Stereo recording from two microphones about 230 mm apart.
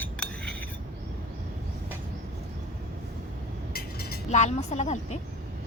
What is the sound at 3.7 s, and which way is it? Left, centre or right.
Chink, left.